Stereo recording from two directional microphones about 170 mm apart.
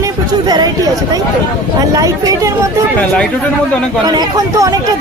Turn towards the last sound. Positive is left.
turn(degrees=-20)  # may be behind; listen again after turning